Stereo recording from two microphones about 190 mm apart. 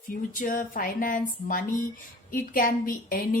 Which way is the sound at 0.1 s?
45° left (ahead or behind).